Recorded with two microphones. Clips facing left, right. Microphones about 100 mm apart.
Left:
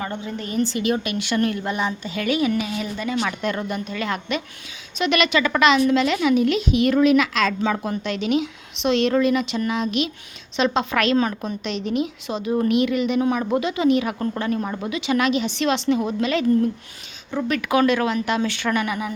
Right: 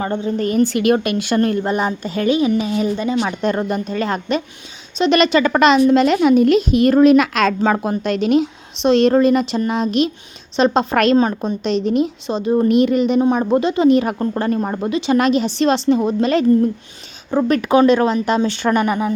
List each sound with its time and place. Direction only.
0.0 s speech: 35° right (ahead or behind)
0.4 s a woman's voice: 55° right (ahead or behind)
2.2 s speech: 25° right (ahead or behind); by 11.2 s 40° right (ahead or behind)
11.2 s speech: 30° right (ahead or behind)